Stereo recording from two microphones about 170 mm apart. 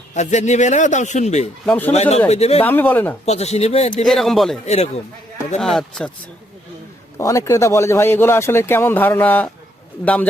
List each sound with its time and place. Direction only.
0.1 s speech: 45° left (ahead or behind)
1.6 s speech: 10° left (ahead or behind)
1.9 s speech: 40° left (ahead or behind)
2.6 s speech: 10° left (ahead or behind)
3.2 s speech: 40° left (ahead or behind)
4.0 s speech: centre (ahead or behind)
4.6 s speech: 40° left (ahead or behind)
5.5 s speech: centre (ahead or behind)
7.2 s speech: 20° left (ahead or behind)